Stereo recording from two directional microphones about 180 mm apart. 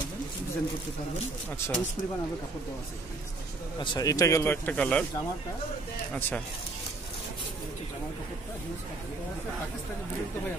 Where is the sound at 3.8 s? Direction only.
25° left (ahead or behind).